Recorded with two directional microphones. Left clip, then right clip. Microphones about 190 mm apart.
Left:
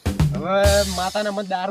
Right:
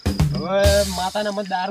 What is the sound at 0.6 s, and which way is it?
Music, centre (ahead or behind).